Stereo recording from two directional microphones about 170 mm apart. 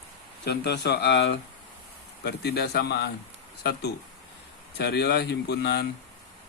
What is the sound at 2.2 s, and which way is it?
Speech, 70° left (ahead or behind).